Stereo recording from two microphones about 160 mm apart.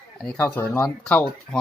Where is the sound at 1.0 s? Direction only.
5° left (ahead or behind).